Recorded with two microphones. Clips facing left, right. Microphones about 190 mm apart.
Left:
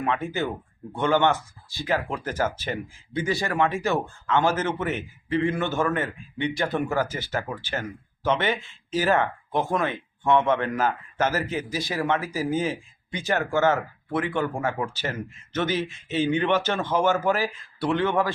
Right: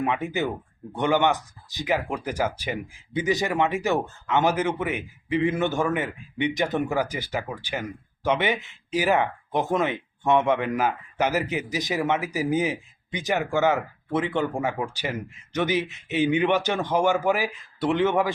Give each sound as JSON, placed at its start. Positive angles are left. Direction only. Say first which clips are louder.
{"t": 0.0, "sound": "speech", "louder": "right 1 dB", "side_deg": -15}